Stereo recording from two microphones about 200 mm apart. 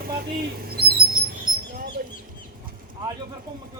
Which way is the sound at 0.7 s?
50° right (ahead or behind).